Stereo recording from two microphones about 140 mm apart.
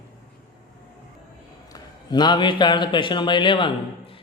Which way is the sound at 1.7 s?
30° left (ahead or behind).